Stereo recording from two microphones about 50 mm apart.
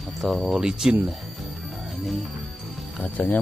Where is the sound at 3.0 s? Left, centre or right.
Left.